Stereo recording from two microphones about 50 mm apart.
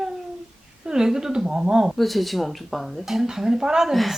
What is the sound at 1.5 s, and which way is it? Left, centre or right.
Speech, centre.